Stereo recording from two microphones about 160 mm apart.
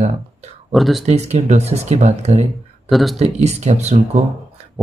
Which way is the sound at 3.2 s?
45° right (ahead or behind).